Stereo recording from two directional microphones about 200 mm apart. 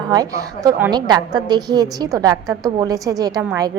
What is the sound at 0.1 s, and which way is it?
A woman's voice, 15° right (ahead or behind).